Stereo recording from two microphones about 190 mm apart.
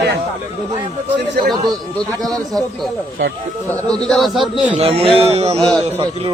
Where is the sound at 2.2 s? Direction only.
Centre (ahead or behind).